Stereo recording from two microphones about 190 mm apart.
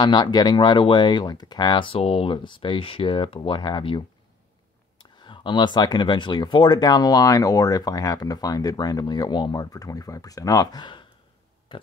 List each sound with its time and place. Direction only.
0.0 s speech: 20° left (ahead or behind)
5.2 s speech: 25° left (ahead or behind)
11.7 s a sound: 25° left (ahead or behind)